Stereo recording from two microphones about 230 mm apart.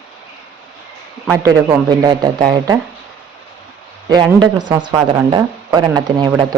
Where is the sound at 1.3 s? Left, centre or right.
Centre.